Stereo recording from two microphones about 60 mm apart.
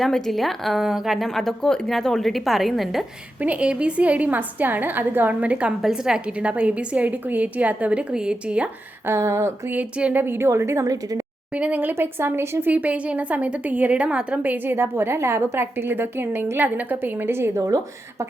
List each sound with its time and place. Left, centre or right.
0.0 s a woman's voice: centre
3.4 s a woman's voice: right
5.8 s a woman's voice: centre
9.0 s a sound: right
10.0 s a woman's voice: right
10.2 s a woman's voice: right
11.5 s speech: right
12.7 s a woman's voice: right
17.5 s speech: right